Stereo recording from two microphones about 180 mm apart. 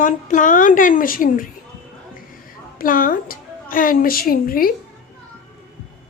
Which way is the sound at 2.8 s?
50° left (ahead or behind).